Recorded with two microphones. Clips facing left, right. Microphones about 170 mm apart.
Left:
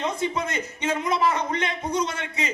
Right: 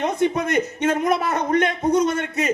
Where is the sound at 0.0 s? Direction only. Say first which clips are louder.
Right 6 dB; 60° right (ahead or behind).